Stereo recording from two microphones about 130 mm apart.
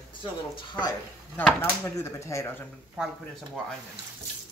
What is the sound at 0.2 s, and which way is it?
Speech, 35° left (ahead or behind).